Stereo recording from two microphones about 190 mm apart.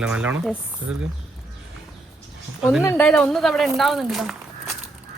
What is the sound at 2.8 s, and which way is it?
Speech, 15° left (ahead or behind).